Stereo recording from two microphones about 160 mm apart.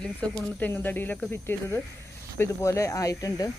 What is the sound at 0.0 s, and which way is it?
Speech, 5° left (ahead or behind).